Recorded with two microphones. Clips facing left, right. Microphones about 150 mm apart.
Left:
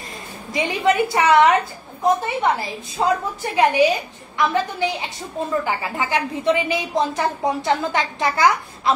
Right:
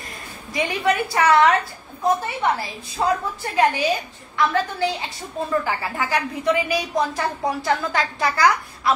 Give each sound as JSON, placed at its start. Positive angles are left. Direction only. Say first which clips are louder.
{"t": 0.5, "sound": "a woman's voice", "louder": "left 2 dB", "side_deg": 20}